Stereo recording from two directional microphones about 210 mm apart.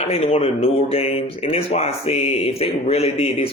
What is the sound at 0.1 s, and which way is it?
Speech, 25° left (ahead or behind).